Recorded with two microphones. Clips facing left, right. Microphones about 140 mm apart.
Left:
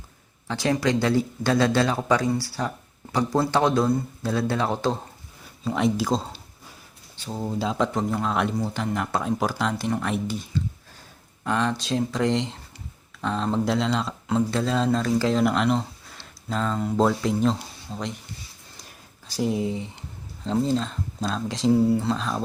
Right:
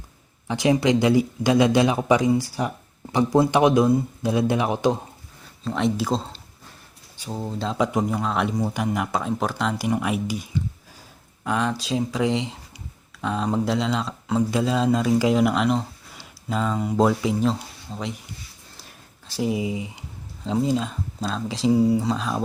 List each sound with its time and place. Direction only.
0.4 s a man's voice: 20° right (ahead or behind)
5.6 s speech: centre (ahead or behind)
7.8 s speech: 10° right (ahead or behind)
8.5 s a man's voice: 15° right (ahead or behind)